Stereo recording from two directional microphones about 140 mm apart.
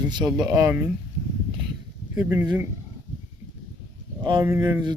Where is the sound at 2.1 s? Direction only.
15° right (ahead or behind).